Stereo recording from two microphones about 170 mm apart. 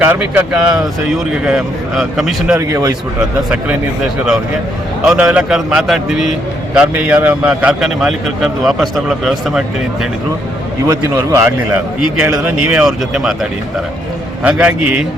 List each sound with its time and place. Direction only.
0.0 s a man's voice: 10° right (ahead or behind)
2.6 s speech: 20° right (ahead or behind)
3.2 s a man's voice: 5° right (ahead or behind)
5.0 s a man's voice: 5° right (ahead or behind)
10.8 s a man's voice: 15° right (ahead or behind)